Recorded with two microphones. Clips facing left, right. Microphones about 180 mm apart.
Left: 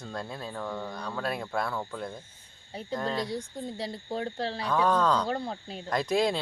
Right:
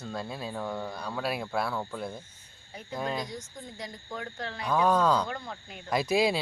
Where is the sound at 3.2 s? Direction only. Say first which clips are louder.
Left 7 dB; 30° left (ahead or behind).